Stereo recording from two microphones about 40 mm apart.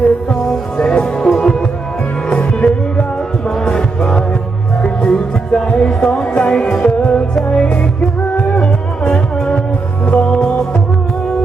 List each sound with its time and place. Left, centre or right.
0.8 s music: left
3.5 s music: centre
6.3 s music: left
6.7 s music: centre
7.0 s music: left
7.5 s music: left